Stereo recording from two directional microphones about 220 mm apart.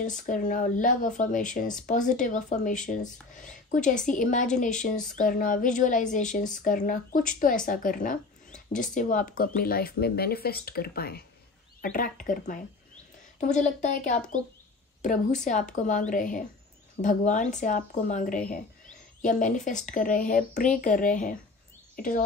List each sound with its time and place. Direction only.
0.0 s speech: 35° left (ahead or behind)